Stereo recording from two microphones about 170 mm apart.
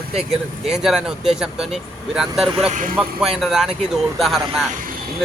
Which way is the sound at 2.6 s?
45° right (ahead or behind).